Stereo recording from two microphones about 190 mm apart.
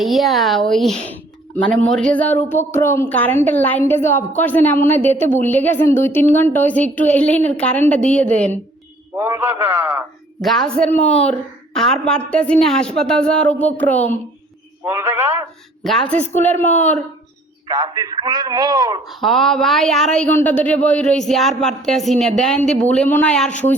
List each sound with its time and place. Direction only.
0.0 s speech: centre (ahead or behind)
9.1 s a man's voice: 15° right (ahead or behind)
10.4 s a woman's voice: centre (ahead or behind)
14.8 s a sound: 10° right (ahead or behind)
15.8 s speech: centre (ahead or behind)
17.7 s a man's voice: 20° right (ahead or behind)
19.0 s speech: centre (ahead or behind)